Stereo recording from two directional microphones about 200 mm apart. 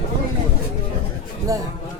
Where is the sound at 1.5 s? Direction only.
15° right (ahead or behind).